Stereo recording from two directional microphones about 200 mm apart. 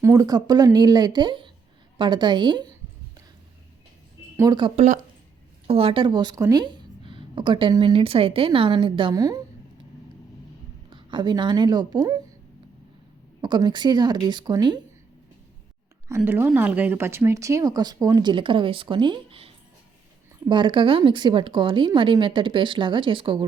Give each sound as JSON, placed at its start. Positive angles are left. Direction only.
{"t": 0.0, "sound": "a woman's voice", "side_deg": -15}
{"t": 4.4, "sound": "a woman's voice", "side_deg": -20}
{"t": 10.8, "sound": "speech", "side_deg": -25}
{"t": 13.4, "sound": "a woman's voice", "side_deg": -20}
{"t": 16.0, "sound": "a woman's voice", "side_deg": -10}